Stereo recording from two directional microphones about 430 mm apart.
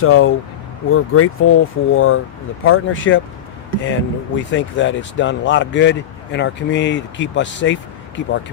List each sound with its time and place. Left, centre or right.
0.0 s speech: left